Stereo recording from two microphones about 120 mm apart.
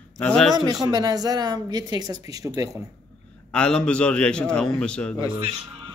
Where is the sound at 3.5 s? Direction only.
10° left (ahead or behind).